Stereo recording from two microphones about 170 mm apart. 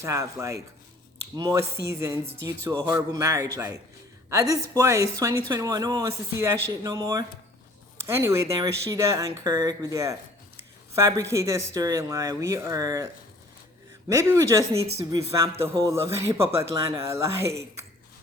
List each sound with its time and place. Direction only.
0.0 s speech: 20° right (ahead or behind)
14.1 s speech: 15° right (ahead or behind)